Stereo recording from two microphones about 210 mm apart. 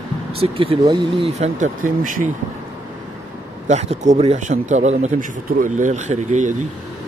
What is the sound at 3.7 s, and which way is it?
Speech, 35° right (ahead or behind).